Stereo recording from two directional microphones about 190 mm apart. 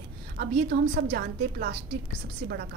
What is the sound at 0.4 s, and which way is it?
A woman's voice, 60° right (ahead or behind).